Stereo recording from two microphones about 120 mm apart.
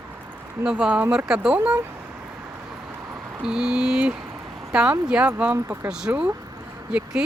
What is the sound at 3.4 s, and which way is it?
Speech, 5° right (ahead or behind).